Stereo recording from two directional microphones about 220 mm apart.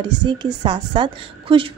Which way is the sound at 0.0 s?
20° right (ahead or behind).